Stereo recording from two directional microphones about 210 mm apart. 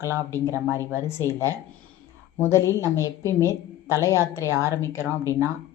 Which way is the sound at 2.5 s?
10° left (ahead or behind).